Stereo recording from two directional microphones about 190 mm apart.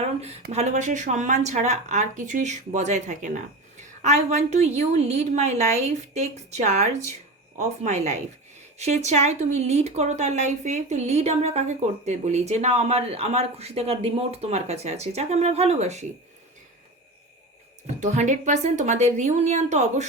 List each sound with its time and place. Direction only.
0.5 s speech: 35° right (ahead or behind)
18.0 s speech: 40° right (ahead or behind)